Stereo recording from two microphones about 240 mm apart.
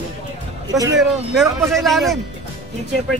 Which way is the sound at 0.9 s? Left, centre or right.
Centre.